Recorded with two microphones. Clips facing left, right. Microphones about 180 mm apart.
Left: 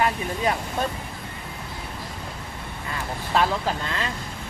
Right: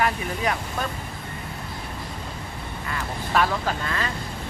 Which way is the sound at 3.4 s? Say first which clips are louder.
Even; 25° left (ahead or behind).